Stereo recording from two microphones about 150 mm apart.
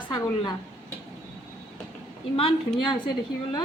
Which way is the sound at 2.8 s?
30° left (ahead or behind).